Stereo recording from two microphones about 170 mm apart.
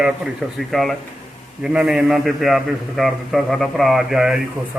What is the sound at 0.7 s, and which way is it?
A man's voice, centre (ahead or behind).